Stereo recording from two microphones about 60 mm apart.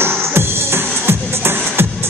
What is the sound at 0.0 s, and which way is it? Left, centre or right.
Music, right.